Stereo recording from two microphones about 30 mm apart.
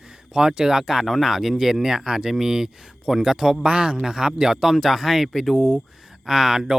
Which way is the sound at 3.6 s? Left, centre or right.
Right.